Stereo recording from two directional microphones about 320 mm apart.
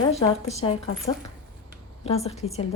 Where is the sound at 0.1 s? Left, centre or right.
Centre.